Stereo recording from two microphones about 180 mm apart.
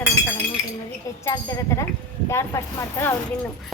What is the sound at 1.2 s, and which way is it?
Speech, 20° left (ahead or behind).